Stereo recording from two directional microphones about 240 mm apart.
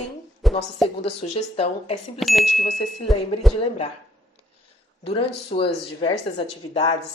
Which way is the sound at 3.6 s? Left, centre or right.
Left.